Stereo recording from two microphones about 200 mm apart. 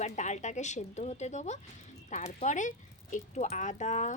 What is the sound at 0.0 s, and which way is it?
A woman's voice, 35° left (ahead or behind).